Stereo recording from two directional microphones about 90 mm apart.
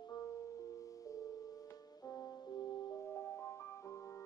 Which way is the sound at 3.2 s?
25° left (ahead or behind).